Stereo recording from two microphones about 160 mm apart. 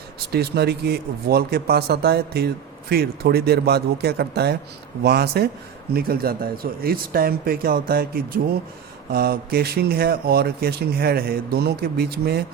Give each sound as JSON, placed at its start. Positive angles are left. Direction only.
{"t": 0.3, "sound": "speech", "side_deg": -90}
{"t": 5.0, "sound": "speech", "side_deg": -80}
{"t": 5.9, "sound": "speech", "side_deg": -70}